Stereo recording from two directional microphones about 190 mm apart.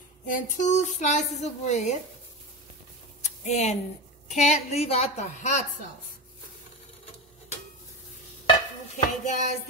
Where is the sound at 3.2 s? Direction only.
35° left (ahead or behind).